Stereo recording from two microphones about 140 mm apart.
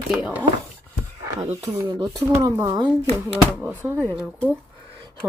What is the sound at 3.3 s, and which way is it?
Speech, 10° right (ahead or behind).